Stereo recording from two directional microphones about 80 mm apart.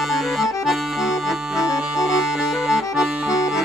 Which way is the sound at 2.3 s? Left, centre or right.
Centre.